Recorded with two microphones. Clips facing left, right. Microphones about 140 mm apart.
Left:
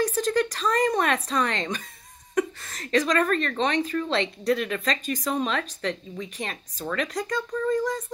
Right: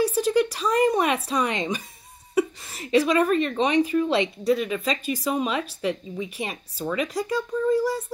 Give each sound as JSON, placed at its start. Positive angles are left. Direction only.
{"t": 0.0, "sound": "speech", "side_deg": -10}
{"t": 4.5, "sound": "speech", "side_deg": 0}